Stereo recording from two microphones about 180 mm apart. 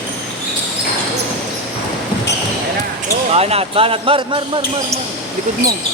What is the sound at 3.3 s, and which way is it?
Speech, 35° right (ahead or behind).